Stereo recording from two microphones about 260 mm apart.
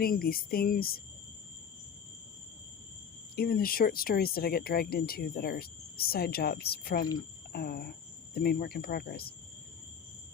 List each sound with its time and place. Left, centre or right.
0.0 s speech: left
3.3 s speech: left